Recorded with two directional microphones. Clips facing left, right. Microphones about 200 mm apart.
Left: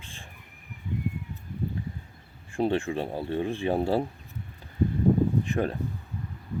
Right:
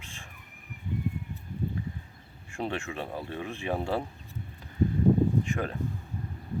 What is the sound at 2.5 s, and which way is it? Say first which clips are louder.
Speech: left 7 dB; 30° left (ahead or behind).